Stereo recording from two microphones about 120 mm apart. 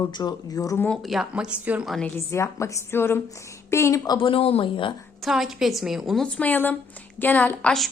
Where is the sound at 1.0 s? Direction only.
5° right (ahead or behind).